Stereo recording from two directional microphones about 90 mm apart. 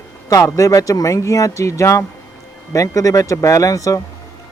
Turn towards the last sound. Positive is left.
turn(degrees=40)  # may be behind; listen again after turning